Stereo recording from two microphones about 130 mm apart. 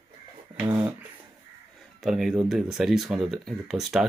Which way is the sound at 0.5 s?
15° right (ahead or behind).